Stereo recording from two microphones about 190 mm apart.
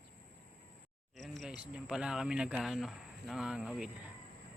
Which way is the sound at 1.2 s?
Centre (ahead or behind).